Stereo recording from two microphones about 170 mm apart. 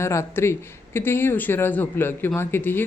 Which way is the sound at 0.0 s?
15° left (ahead or behind).